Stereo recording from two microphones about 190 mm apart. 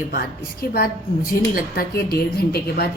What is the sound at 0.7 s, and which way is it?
A woman's voice, 50° left (ahead or behind).